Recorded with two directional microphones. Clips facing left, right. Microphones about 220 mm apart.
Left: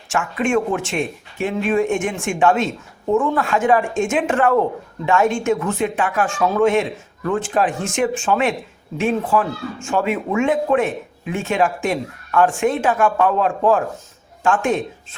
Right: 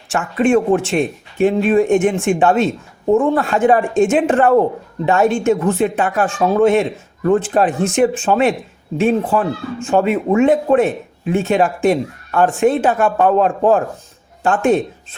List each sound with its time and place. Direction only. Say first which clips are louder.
0.1 s speech: right 5 dB; 35° right (ahead or behind)